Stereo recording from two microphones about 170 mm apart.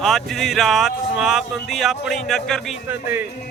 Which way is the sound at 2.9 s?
10° right (ahead or behind).